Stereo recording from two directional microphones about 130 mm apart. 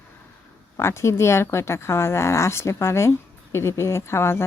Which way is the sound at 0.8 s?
20° left (ahead or behind).